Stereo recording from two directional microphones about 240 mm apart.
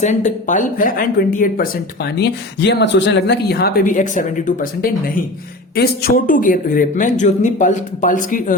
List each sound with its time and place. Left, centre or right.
0.0 s speech: left